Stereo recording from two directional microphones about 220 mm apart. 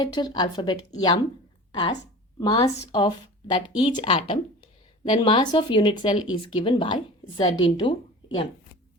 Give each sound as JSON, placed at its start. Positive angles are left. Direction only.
{"t": 0.0, "sound": "a woman's voice", "side_deg": 20}